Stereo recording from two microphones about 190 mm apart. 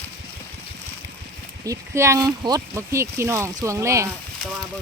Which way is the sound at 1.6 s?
15° right (ahead or behind).